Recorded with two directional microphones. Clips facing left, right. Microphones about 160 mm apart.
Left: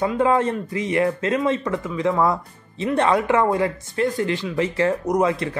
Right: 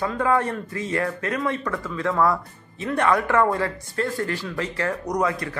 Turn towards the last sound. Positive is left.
turn(degrees=25)  # may be behind; listen again after turning